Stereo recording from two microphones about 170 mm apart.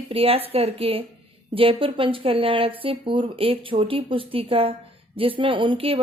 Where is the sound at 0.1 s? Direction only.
35° right (ahead or behind).